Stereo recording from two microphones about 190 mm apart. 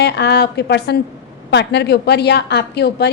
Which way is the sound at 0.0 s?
60° left (ahead or behind).